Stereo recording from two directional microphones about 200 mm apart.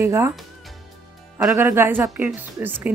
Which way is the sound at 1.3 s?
15° right (ahead or behind).